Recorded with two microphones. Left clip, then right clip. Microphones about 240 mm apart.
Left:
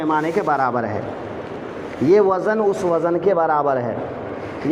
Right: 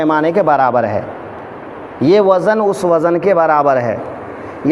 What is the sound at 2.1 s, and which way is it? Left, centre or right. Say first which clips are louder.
Speech: right 5 dB; right.